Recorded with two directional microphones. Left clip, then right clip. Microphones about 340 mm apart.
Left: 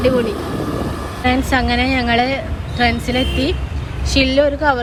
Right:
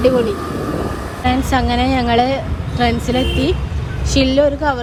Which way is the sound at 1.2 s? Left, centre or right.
Centre.